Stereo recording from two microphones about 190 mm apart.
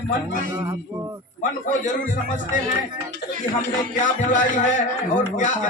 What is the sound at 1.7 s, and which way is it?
Speech, 45° left (ahead or behind).